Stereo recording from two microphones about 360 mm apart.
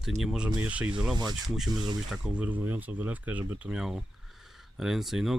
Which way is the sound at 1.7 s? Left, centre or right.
Centre.